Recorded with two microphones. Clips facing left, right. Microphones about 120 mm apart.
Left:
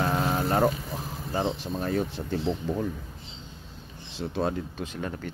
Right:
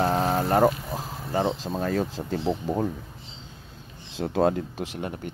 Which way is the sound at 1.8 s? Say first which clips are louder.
Right 1 dB; 85° right.